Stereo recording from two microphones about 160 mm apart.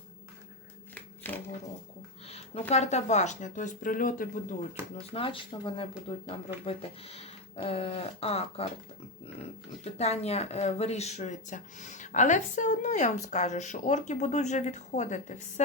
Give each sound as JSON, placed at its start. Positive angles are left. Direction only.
{"t": 0.9, "sound": "a sound", "side_deg": 10}
{"t": 2.2, "sound": "speech", "side_deg": 40}
{"t": 5.1, "sound": "speech", "side_deg": 35}
{"t": 10.0, "sound": "speech", "side_deg": 40}